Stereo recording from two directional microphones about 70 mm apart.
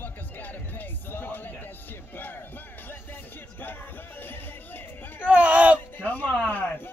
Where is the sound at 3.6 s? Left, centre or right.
Left.